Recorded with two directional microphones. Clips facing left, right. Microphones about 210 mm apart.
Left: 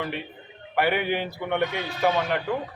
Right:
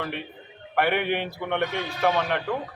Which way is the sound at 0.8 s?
Centre (ahead or behind).